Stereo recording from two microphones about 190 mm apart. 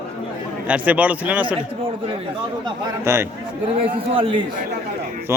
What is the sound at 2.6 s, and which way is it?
Speech, 15° right (ahead or behind).